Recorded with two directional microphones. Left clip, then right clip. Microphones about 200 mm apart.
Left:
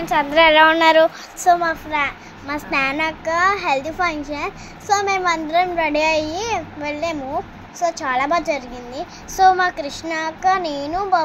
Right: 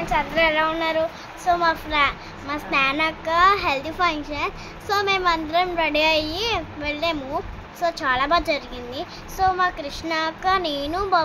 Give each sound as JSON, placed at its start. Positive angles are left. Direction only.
{"t": 0.0, "sound": "a woman's voice", "side_deg": 35}
{"t": 1.6, "sound": "a child's voice", "side_deg": 10}
{"t": 2.4, "sound": "a child's voice", "side_deg": 20}
{"t": 9.4, "sound": "speech", "side_deg": 20}
{"t": 10.0, "sound": "a child's voice", "side_deg": 10}